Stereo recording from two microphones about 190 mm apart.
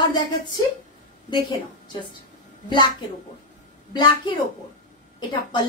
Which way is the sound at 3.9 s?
25° left (ahead or behind).